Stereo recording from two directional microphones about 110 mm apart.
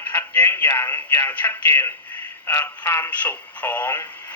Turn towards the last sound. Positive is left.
turn(degrees=20)  # may be behind; listen again after turning